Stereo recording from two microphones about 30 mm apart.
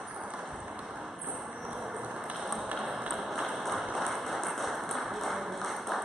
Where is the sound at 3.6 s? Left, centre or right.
Centre.